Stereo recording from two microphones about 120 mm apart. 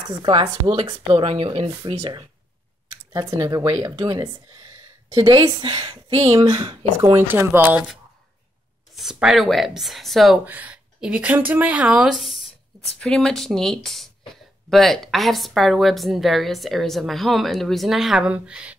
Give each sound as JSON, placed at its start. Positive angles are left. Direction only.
{"t": 0.2, "sound": "speech", "side_deg": -45}
{"t": 3.1, "sound": "speech", "side_deg": -30}
{"t": 5.4, "sound": "speech", "side_deg": -30}
{"t": 5.7, "sound": "speech", "side_deg": -45}
{"t": 6.3, "sound": "speech", "side_deg": -40}
{"t": 7.2, "sound": "speech", "side_deg": -20}
{"t": 8.9, "sound": "speech", "side_deg": -5}
{"t": 10.4, "sound": "speech", "side_deg": -15}